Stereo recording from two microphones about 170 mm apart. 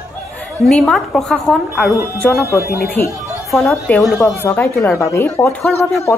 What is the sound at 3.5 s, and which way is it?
Speech, centre (ahead or behind).